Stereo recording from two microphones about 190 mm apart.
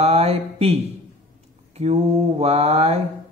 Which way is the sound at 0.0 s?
35° right (ahead or behind).